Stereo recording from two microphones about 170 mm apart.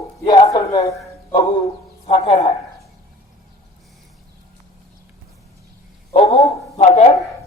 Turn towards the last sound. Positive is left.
turn(degrees=40)  # may be behind; listen again after turning